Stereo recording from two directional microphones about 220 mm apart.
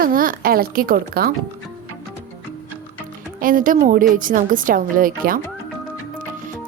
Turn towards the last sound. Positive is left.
turn(degrees=-40)  # may be behind; listen again after turning